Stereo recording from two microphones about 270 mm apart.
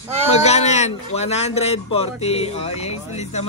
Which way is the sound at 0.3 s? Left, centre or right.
Left.